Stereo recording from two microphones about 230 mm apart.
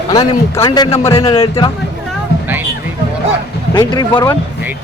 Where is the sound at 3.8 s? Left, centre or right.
Centre.